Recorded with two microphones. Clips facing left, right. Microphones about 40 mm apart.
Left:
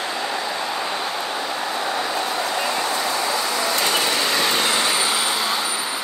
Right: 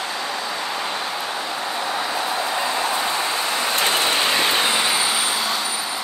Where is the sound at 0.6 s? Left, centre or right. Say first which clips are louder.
Left 1 dB; centre.